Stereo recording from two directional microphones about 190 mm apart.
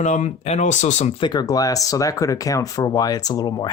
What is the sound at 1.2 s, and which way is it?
Speech, 20° left (ahead or behind).